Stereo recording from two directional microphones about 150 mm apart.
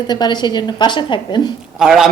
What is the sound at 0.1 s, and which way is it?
A woman's voice, 30° left (ahead or behind).